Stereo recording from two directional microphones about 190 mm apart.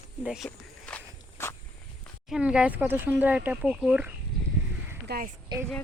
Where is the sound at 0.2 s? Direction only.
5° right (ahead or behind).